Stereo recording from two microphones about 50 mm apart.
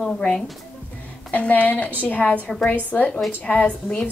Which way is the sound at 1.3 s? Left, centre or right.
Left.